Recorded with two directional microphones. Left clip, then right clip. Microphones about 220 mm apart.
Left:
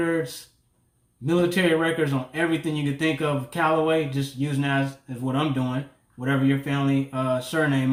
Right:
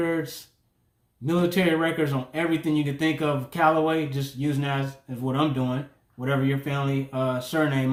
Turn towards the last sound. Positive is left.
turn(degrees=-20)  # may be behind; listen again after turning